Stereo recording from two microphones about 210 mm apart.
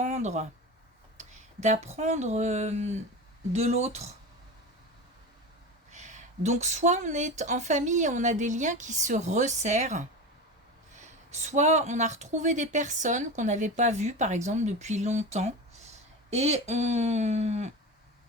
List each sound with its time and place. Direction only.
0.0 s a sound: 35° right (ahead or behind)
1.2 s speech: 35° right (ahead or behind)
5.9 s speech: 35° right (ahead or behind)